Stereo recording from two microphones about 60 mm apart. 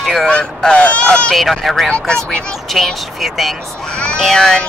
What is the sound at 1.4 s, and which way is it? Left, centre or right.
Speech, centre.